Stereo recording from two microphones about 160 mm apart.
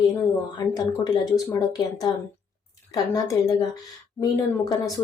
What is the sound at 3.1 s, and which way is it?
Speech, 20° left (ahead or behind).